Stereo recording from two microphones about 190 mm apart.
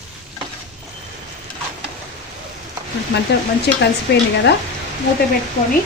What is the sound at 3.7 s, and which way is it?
Speech, 65° left (ahead or behind).